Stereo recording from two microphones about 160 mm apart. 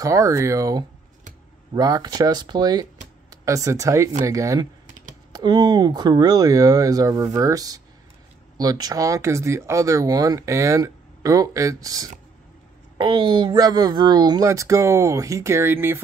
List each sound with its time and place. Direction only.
0.0 s speech: 20° right (ahead or behind)